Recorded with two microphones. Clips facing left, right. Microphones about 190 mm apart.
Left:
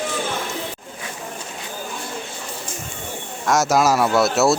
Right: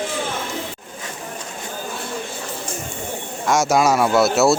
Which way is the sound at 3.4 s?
Centre (ahead or behind).